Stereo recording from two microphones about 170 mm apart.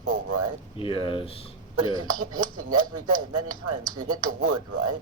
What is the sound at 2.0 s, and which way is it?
Speech, 25° right (ahead or behind).